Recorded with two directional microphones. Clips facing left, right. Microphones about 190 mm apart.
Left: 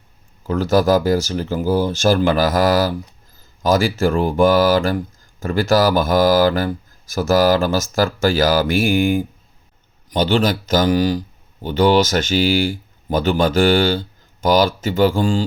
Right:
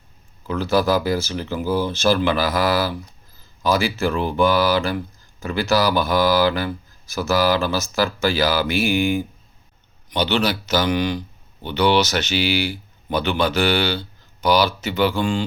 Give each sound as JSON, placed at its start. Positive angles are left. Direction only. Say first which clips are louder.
{"t": 0.4, "sound": "speech", "louder": "left 4 dB", "side_deg": 45}